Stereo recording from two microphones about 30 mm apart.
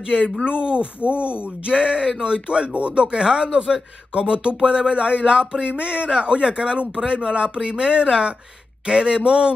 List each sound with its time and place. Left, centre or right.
0.5 s speech: right
1.7 s speech: right
2.7 s speech: right
3.1 s speech: right